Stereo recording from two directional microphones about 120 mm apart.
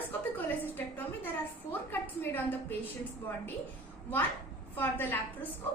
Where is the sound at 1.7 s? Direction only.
15° left (ahead or behind).